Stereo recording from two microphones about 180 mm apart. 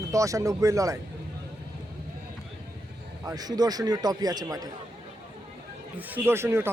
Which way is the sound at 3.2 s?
20° right (ahead or behind).